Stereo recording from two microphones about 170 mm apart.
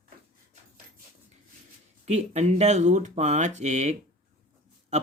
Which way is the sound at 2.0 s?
40° right (ahead or behind).